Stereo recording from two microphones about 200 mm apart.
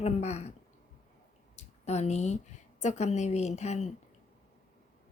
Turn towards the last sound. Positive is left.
turn(degrees=35)  # may be behind; listen again after turning